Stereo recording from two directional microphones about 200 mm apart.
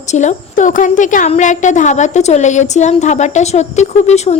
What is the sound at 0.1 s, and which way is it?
A woman's voice, 35° left (ahead or behind).